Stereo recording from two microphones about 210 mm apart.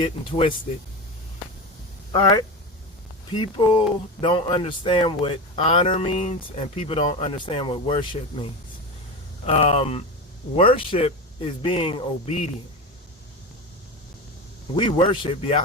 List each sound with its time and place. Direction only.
0.0 s speech: 25° left (ahead or behind)
3.6 s speech: 25° left (ahead or behind)
9.5 s speech: 30° left (ahead or behind)
14.8 s speech: 25° left (ahead or behind)